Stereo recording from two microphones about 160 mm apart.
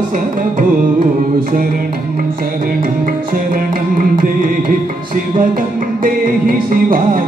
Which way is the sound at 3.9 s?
60° right (ahead or behind).